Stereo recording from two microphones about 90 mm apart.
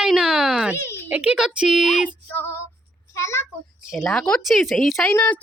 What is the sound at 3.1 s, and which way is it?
Speech, 30° left (ahead or behind).